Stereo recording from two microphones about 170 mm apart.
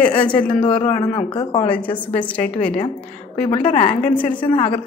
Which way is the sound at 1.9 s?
10° left (ahead or behind).